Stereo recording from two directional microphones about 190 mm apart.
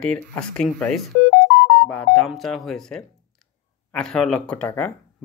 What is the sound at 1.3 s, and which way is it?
Music, 55° left (ahead or behind).